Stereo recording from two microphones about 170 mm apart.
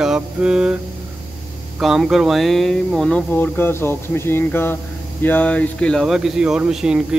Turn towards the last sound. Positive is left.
turn(degrees=-5)  # may be behind; listen again after turning